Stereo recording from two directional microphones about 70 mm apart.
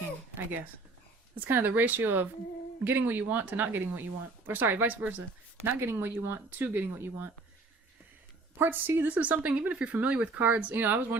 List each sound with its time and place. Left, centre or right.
1.4 s speech: right
8.5 s speech: right
9.1 s speech: centre